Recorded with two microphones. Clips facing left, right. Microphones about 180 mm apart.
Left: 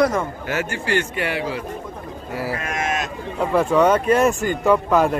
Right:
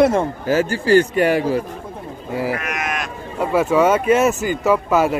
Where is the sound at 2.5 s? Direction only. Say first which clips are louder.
Left 1 dB; 25° left (ahead or behind).